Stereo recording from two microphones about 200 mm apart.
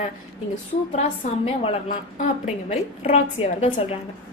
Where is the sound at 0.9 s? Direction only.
35° left (ahead or behind).